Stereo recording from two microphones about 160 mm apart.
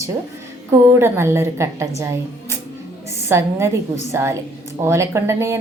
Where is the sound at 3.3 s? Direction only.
15° right (ahead or behind).